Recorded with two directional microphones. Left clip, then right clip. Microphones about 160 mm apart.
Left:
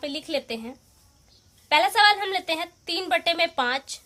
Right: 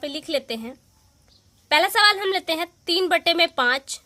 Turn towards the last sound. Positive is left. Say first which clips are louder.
# right 4 dB
turn(degrees=-55)  # may be behind; listen again after turning